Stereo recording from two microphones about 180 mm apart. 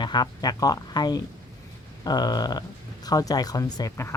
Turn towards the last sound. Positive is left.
turn(degrees=20)  # may be behind; listen again after turning